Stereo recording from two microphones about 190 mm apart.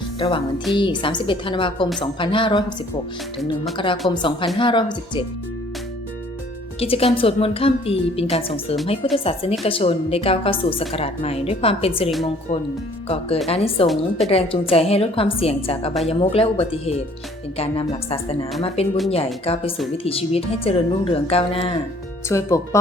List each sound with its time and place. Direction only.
0.2 s a woman's voice: 25° left (ahead or behind)
4.1 s a woman's voice: 25° left (ahead or behind)
6.7 s a woman's voice: 30° left (ahead or behind)
13.8 s a woman's voice: centre (ahead or behind)
14.3 s a woman's voice: 30° left (ahead or behind)
22.3 s speech: 15° left (ahead or behind)